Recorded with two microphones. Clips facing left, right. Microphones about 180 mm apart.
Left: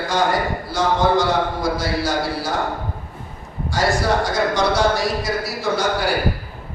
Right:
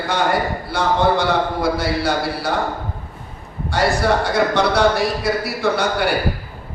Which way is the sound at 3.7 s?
60° right (ahead or behind).